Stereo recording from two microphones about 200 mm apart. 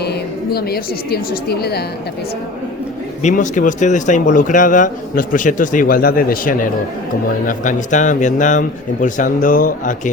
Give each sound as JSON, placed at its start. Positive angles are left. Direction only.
{"t": 0.5, "sound": "a woman's voice", "side_deg": 50}
{"t": 3.2, "sound": "speech", "side_deg": 40}